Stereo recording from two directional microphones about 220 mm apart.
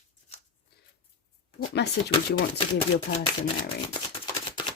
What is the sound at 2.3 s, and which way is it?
Speech, 50° left (ahead or behind).